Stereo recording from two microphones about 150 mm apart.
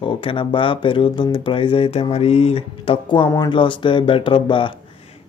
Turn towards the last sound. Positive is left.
turn(degrees=35)  # may be behind; listen again after turning